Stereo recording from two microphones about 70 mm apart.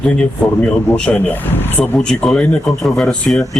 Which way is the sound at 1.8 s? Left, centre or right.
Centre.